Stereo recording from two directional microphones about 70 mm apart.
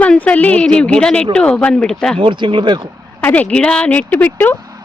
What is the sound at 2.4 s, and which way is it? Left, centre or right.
Speech, right.